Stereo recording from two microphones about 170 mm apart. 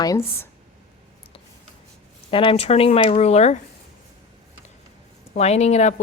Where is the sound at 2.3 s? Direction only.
30° left (ahead or behind).